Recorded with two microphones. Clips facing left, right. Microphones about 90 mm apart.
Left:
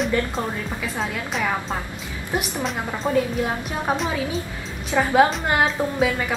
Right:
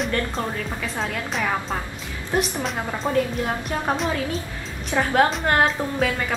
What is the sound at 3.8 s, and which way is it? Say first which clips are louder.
A woman's voice: left 1 dB; 5° left (ahead or behind).